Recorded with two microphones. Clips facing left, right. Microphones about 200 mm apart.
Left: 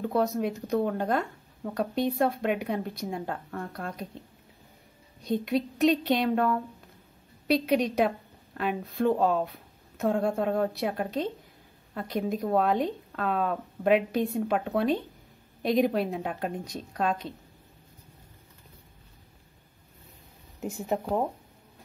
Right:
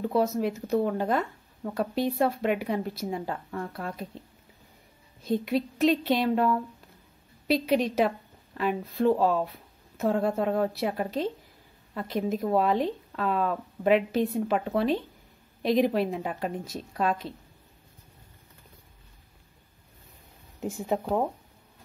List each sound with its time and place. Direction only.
0.0 s speech: 5° right (ahead or behind)
5.2 s speech: 5° right (ahead or behind)
20.7 s speech: 15° right (ahead or behind)